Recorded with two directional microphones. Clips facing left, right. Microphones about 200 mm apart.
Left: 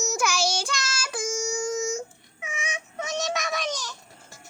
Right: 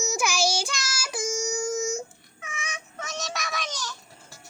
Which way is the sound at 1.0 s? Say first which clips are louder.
Right 1 dB; 20° right (ahead or behind).